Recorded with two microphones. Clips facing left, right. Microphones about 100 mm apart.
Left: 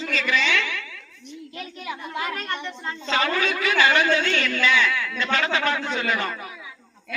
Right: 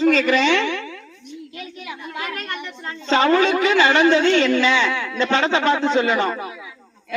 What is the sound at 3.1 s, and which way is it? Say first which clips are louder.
A woman's voice: right 8 dB; 30° right (ahead or behind).